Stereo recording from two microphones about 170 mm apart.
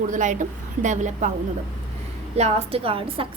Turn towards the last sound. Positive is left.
turn(degrees=-30)  # may be behind; listen again after turning